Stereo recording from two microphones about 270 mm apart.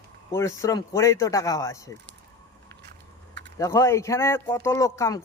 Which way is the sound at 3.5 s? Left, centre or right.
Centre.